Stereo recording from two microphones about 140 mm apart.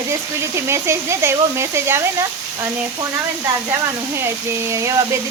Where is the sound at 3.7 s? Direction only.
20° right (ahead or behind).